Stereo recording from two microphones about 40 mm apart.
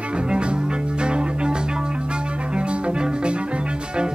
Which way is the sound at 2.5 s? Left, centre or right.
Right.